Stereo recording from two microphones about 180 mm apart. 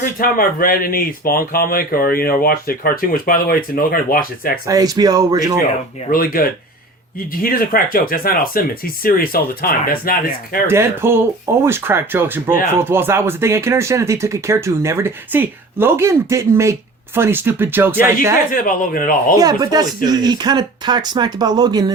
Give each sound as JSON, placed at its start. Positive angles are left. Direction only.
{"t": 0.0, "sound": "speech", "side_deg": 50}
{"t": 4.6, "sound": "speech", "side_deg": -20}
{"t": 6.1, "sound": "speech", "side_deg": 55}
{"t": 10.7, "sound": "speech", "side_deg": -15}
{"t": 18.5, "sound": "speech", "side_deg": 50}
{"t": 19.4, "sound": "speech", "side_deg": -20}